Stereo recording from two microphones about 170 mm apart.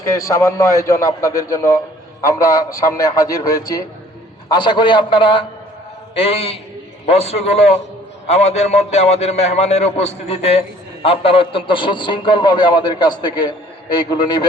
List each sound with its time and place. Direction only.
0.0 s a man's voice: 20° left (ahead or behind)